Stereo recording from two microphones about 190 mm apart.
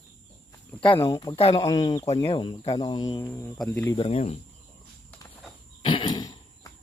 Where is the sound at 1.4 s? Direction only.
30° left (ahead or behind).